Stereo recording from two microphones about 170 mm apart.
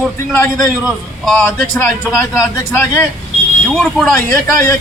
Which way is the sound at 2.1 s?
20° left (ahead or behind).